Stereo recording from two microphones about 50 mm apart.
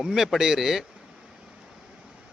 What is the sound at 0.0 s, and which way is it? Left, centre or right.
Speech, centre.